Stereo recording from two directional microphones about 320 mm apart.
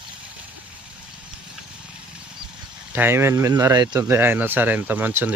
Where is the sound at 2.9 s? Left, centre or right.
Centre.